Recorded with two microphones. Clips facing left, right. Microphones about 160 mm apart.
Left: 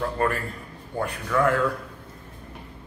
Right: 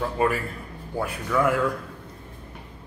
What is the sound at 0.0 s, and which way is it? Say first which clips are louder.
A man's voice: right 1 dB; 5° right (ahead or behind).